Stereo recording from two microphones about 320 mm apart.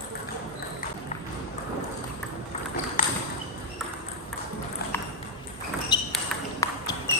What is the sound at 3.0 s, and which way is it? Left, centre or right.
Ping, left.